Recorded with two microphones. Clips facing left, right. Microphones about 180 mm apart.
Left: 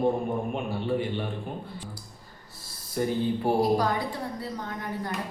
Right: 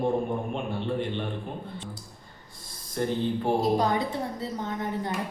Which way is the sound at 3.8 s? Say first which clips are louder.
Right 2 dB; 25° right (ahead or behind).